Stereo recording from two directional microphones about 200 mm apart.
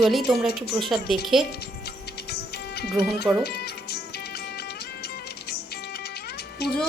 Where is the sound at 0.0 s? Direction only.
Centre (ahead or behind).